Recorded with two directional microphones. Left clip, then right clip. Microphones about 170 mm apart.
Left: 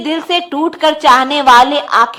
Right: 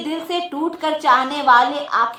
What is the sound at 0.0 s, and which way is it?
A woman's voice, 25° left (ahead or behind).